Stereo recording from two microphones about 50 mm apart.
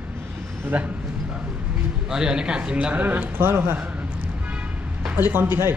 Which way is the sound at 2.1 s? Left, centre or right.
Centre.